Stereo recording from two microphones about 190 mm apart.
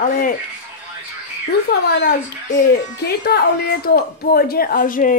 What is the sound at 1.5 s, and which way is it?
A woman's voice, 55° left (ahead or behind).